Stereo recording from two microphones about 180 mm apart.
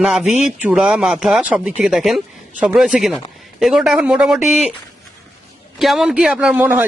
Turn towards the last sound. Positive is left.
turn(degrees=-10)  # may be behind; listen again after turning